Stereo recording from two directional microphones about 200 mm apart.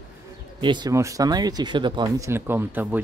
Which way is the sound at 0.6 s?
20° right (ahead or behind).